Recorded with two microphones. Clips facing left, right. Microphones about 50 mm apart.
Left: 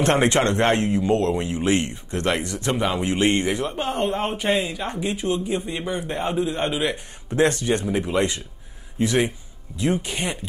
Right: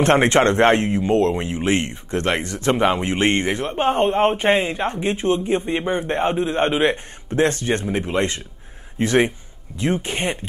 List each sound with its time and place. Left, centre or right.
0.0 s speech: right